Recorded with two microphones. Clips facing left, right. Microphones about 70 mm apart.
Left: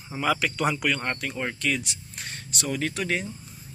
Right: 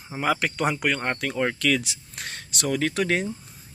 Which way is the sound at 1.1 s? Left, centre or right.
Right.